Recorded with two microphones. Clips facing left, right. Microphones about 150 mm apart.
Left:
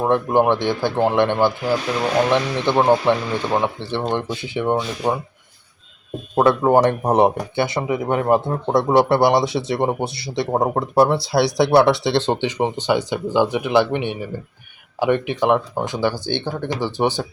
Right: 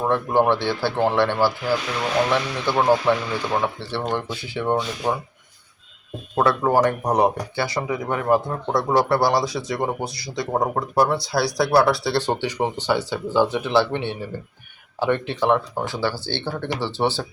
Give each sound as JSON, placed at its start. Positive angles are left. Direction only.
{"t": 0.0, "sound": "speech", "side_deg": 15}
{"t": 6.3, "sound": "speech", "side_deg": 20}